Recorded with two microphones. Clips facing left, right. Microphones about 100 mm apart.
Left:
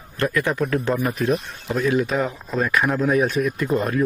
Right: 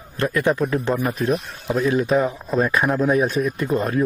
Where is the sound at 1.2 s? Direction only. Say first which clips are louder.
Even; centre (ahead or behind).